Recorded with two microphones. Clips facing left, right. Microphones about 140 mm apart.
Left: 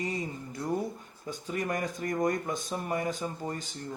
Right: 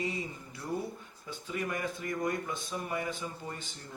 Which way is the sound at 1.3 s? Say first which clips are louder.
Left 4 dB; 40° left (ahead or behind).